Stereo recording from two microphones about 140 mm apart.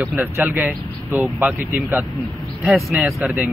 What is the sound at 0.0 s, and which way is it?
Speech, 10° right (ahead or behind).